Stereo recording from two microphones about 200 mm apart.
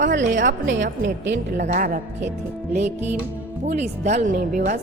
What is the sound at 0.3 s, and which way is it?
A woman's voice, 40° right (ahead or behind).